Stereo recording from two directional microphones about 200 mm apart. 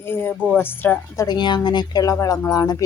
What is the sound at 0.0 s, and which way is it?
A woman's voice, 10° left (ahead or behind).